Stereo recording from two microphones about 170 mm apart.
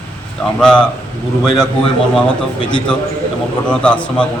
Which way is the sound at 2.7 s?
5° left (ahead or behind).